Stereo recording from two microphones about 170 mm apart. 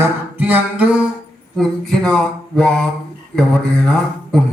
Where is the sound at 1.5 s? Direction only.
Centre (ahead or behind).